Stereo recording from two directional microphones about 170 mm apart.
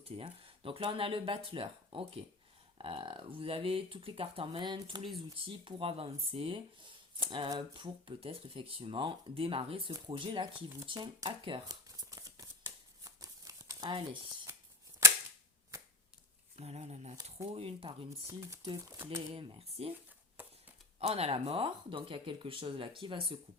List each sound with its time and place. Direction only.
0.0 s speech: 35° right (ahead or behind)
10.8 s shuffling cards: 25° right (ahead or behind)
14.5 s scissors: 15° right (ahead or behind)
16.6 s speech: 40° right (ahead or behind)
18.3 s speech: 20° right (ahead or behind)
19.3 s speech: 30° right (ahead or behind)
20.3 s a sound: 10° right (ahead or behind)
21.0 s speech: 35° right (ahead or behind)